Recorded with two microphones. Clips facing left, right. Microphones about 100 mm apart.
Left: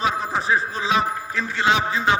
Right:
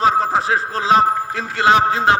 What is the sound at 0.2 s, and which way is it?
Speech, 90° right.